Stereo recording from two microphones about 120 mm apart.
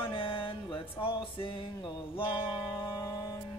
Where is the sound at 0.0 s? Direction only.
45° left (ahead or behind).